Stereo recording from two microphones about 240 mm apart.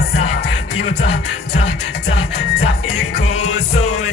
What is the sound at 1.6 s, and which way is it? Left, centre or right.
Music, left.